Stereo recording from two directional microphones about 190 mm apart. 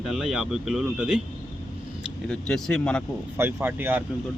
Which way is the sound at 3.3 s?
10° right (ahead or behind).